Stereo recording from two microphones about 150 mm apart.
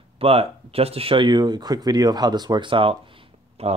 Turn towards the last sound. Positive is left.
turn(degrees=-45)  # may be behind; listen again after turning